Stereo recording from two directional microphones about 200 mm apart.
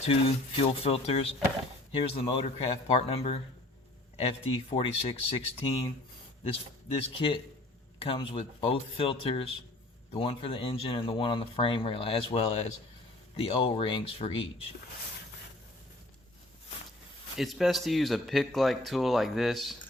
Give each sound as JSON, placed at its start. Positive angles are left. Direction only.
{"t": 0.6, "sound": "speech", "side_deg": 30}
{"t": 17.3, "sound": "speech", "side_deg": 0}